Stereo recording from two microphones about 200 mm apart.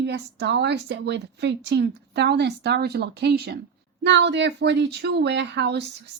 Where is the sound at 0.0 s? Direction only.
60° right (ahead or behind).